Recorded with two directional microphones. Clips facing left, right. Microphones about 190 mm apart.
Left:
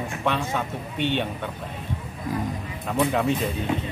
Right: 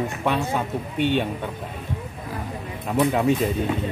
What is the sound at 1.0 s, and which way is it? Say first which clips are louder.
Speech: right 3 dB; 45° right (ahead or behind).